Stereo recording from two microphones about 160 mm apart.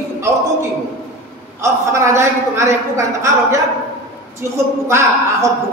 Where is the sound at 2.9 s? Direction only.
20° right (ahead or behind).